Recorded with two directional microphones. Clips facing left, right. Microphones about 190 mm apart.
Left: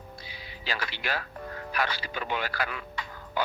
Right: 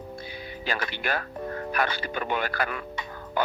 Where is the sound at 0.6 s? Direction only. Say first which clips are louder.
Right 3 dB; 50° right (ahead or behind).